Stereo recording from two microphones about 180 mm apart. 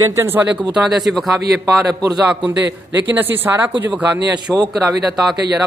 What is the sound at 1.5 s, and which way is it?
Speech, 20° right (ahead or behind).